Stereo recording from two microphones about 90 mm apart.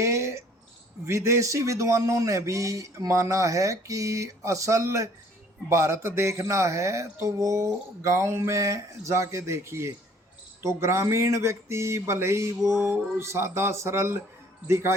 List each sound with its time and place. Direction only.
0.0 s cricket: 30° right (ahead or behind)
1.0 s speech: 30° right (ahead or behind)